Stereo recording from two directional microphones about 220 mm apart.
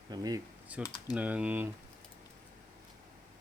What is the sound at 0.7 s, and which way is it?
Speech, 5° right (ahead or behind).